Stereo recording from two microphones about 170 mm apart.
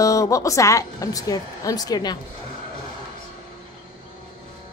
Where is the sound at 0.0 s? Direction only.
20° left (ahead or behind).